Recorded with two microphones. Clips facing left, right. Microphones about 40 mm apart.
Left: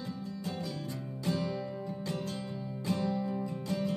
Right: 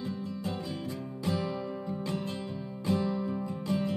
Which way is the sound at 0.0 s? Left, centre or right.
Right.